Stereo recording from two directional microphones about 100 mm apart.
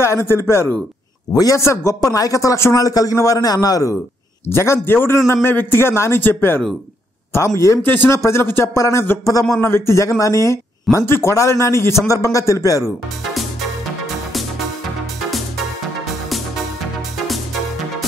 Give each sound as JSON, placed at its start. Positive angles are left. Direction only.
{"t": 0.0, "sound": "a man's voice", "side_deg": 25}
{"t": 4.5, "sound": "a man's voice", "side_deg": 25}
{"t": 13.2, "sound": "music", "side_deg": 0}